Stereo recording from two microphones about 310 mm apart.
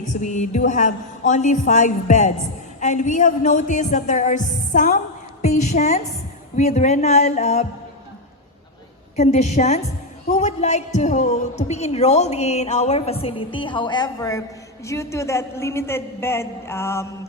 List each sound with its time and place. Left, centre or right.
0.0 s a woman's voice: left
9.1 s a woman's voice: left